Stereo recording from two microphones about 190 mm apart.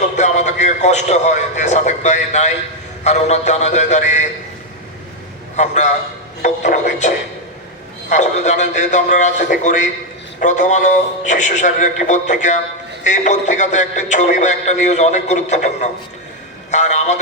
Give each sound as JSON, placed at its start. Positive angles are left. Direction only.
{"t": 0.2, "sound": "a man's voice", "side_deg": 40}
{"t": 5.5, "sound": "speech", "side_deg": 40}
{"t": 8.1, "sound": "speech", "side_deg": 40}